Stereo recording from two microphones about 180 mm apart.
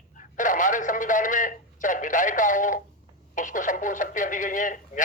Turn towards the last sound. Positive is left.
turn(degrees=45)  # may be behind; listen again after turning